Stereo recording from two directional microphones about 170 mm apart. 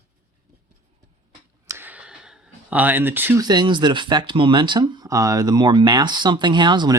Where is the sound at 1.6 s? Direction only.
10° right (ahead or behind).